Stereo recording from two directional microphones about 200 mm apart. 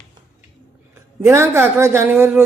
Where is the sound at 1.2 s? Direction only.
15° right (ahead or behind).